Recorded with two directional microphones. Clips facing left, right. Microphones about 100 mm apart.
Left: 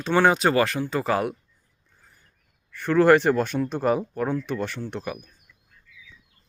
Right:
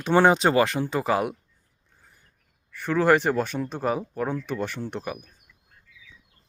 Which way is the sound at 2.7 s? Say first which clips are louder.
Left 3 dB; 5° right (ahead or behind).